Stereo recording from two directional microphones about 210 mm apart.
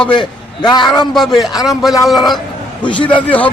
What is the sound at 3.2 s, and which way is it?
Speech, 5° left (ahead or behind).